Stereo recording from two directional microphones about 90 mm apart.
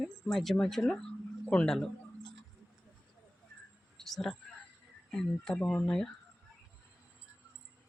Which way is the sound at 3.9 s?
5° left (ahead or behind).